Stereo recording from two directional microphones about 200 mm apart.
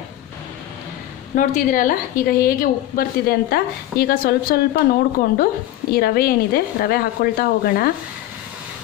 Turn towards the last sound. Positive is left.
turn(degrees=50)  # may be behind; listen again after turning